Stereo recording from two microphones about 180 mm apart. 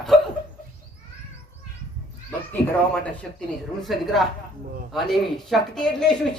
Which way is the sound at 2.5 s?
5° left (ahead or behind).